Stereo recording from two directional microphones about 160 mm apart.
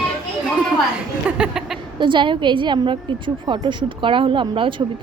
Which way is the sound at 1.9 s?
30° right (ahead or behind).